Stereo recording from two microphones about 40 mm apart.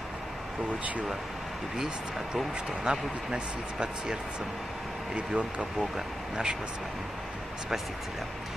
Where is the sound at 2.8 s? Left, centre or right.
Right.